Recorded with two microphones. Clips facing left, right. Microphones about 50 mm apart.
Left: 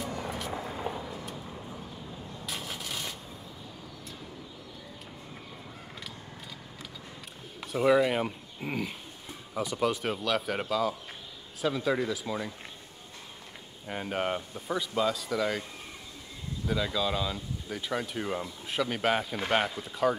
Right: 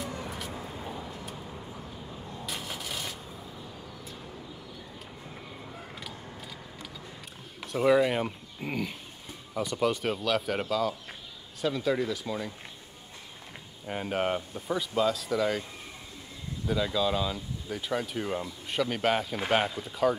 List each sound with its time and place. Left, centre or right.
0.2 s vehicle: centre
0.5 s vehicle: left
2.4 s vehicle: centre
7.6 s speech: centre
13.8 s speech: centre
16.6 s speech: centre